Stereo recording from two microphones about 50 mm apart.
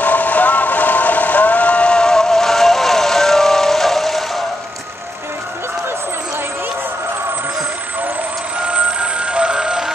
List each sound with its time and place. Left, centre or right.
0.0 s vehicle: left; by 4.2 s centre
8.6 s vehicle: right